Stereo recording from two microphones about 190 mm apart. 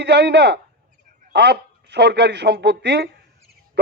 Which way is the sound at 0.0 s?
60° right (ahead or behind).